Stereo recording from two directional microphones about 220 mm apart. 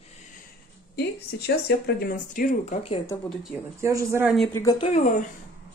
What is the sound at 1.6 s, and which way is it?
Speech, 45° left (ahead or behind).